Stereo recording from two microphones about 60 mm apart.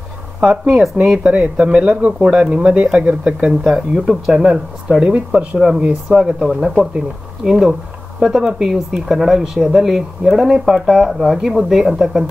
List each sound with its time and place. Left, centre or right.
0.4 s speech: centre
3.9 s speech: centre
6.1 s speech: centre